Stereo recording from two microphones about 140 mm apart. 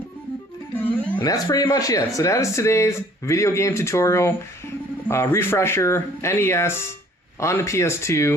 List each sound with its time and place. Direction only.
1.2 s speech: 25° left (ahead or behind)